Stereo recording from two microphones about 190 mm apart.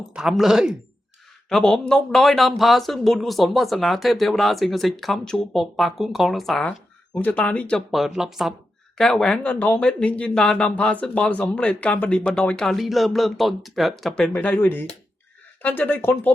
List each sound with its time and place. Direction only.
0.1 s speech: 5° right (ahead or behind)